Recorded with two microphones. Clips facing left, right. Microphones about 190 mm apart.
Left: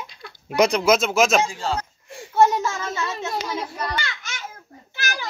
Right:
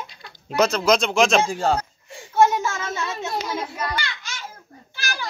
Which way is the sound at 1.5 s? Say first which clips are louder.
Right 5 dB; 50° right (ahead or behind).